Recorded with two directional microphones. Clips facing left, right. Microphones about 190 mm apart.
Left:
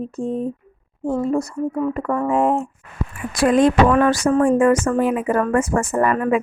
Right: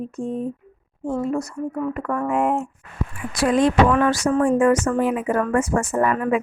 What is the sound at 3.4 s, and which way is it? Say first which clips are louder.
Speech: left 3 dB; 50° left (ahead or behind).